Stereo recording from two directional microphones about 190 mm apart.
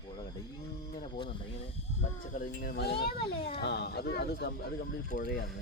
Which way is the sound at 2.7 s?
55° left (ahead or behind).